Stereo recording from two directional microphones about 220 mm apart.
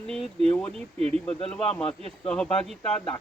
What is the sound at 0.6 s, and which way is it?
Speech, 5° left (ahead or behind).